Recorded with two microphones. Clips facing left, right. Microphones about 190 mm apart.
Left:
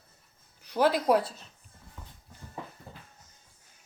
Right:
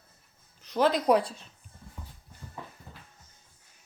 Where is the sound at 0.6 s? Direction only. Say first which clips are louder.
Even; 10° left (ahead or behind).